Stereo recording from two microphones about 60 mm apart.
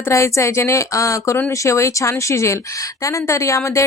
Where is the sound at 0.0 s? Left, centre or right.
Left.